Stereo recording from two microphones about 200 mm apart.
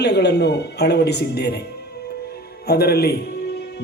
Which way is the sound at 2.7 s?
50° left (ahead or behind).